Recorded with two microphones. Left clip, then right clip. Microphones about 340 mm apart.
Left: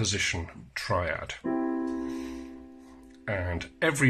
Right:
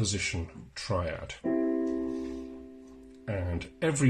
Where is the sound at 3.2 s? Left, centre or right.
Left.